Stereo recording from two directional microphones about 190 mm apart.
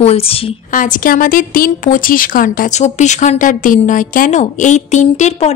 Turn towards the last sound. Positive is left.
turn(degrees=35)  # may be behind; listen again after turning